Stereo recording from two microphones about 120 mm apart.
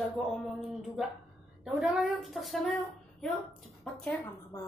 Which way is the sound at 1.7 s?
5° right (ahead or behind).